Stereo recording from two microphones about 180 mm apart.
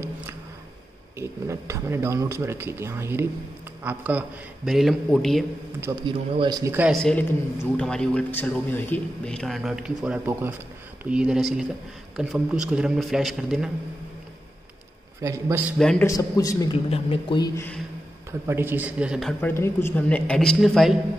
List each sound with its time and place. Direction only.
1.1 s speech: 15° right (ahead or behind); by 5.4 s centre (ahead or behind)
5.8 s speech: 15° right (ahead or behind)
6.9 s speech: 5° left (ahead or behind)
15.2 s speech: 15° right (ahead or behind)
15.8 s speech: 5° left (ahead or behind)
16.1 s a man's voice: 20° left (ahead or behind)
16.7 s speech: 30° left (ahead or behind)
18.5 s speech: 10° right (ahead or behind)
19.5 s a woman's voice: 15° left (ahead or behind)